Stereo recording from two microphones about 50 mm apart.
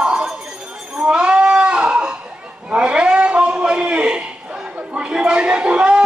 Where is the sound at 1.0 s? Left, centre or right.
Centre.